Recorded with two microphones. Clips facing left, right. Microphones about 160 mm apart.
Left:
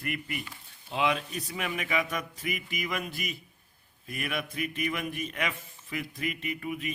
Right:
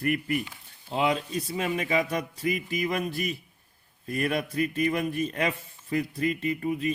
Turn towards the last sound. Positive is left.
turn(degrees=-35)  # may be behind; listen again after turning